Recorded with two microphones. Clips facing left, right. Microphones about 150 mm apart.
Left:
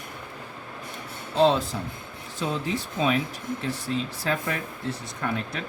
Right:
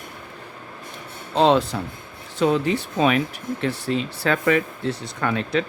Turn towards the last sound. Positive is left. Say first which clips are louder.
# right 7 dB
turn(degrees=-85)